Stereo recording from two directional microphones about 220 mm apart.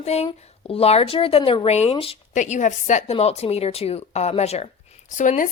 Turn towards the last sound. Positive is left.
turn(degrees=35)  # may be behind; listen again after turning